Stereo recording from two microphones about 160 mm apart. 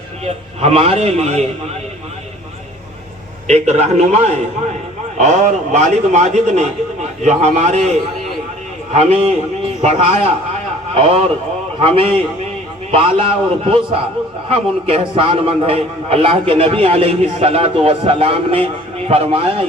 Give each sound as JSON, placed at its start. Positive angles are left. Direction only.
{"t": 0.3, "sound": "a man's voice", "side_deg": -40}
{"t": 3.4, "sound": "a man's voice", "side_deg": -45}